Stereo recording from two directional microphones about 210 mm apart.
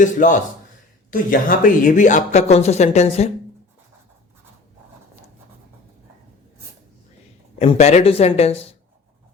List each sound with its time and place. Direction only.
0.0 s speech: 35° left (ahead or behind)
7.6 s speech: 30° left (ahead or behind)